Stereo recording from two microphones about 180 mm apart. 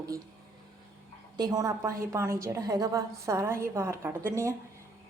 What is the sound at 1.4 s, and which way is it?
A woman's voice, 20° right (ahead or behind).